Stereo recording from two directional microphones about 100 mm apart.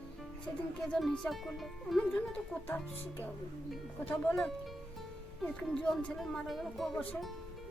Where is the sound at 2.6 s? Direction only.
20° left (ahead or behind).